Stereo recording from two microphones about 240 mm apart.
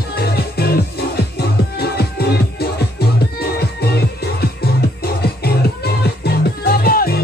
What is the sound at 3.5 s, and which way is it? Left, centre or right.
Music, left.